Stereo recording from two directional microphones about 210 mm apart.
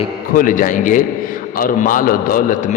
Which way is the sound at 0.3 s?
40° left (ahead or behind).